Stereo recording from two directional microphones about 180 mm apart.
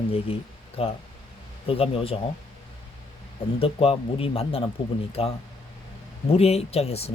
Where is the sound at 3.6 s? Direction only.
30° left (ahead or behind).